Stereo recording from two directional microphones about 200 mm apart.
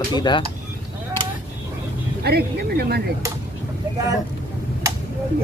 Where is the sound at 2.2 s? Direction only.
55° right (ahead or behind).